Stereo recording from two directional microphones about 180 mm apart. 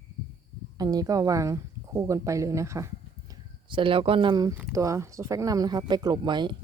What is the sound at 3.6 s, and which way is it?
Speech, 30° right (ahead or behind).